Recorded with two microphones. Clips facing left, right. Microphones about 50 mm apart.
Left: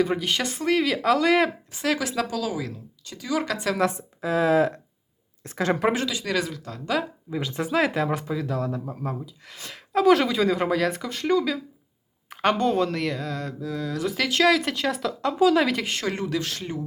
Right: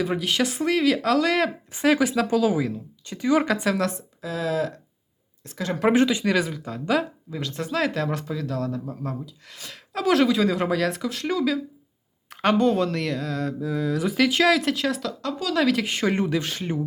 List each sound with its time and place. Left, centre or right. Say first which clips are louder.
0.0 s speech: even; centre
1.8 s speech: right 5 dB; centre
2.3 s speech: right 7 dB; right
3.4 s speech: right 3 dB; centre
4.2 s a woman's voice: left 5 dB; left
5.9 s speech: right 7 dB; right
6.2 s speech: right 4 dB; centre
7.3 s speech: left 2 dB; centre
15.2 s speech: left 5 dB; centre
15.7 s speech: right 2 dB; centre
16.0 s speech: right 4 dB; centre